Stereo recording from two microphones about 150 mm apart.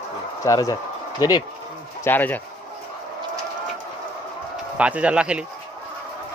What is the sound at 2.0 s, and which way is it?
Speech, 15° left (ahead or behind).